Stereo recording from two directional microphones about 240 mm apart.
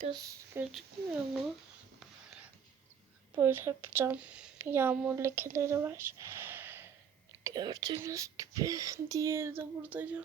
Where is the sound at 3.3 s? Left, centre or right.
Centre.